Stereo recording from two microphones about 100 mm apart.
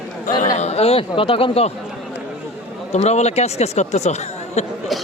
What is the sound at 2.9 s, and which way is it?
Speech, 90° left.